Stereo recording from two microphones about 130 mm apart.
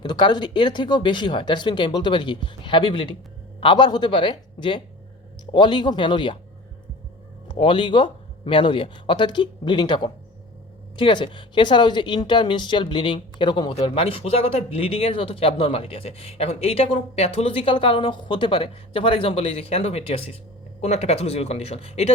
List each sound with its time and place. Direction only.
0.0 s speech: 35° left (ahead or behind)
7.4 s speech: 40° left (ahead or behind)